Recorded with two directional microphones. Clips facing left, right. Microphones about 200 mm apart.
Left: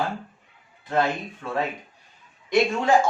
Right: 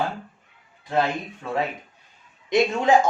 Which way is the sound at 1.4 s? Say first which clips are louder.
Right 1 dB; 20° right (ahead or behind).